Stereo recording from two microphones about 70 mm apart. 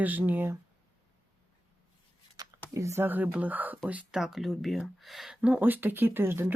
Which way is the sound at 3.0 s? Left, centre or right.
Right.